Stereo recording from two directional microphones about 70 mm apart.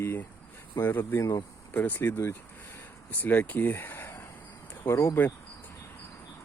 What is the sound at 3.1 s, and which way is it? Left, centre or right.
Speech, left.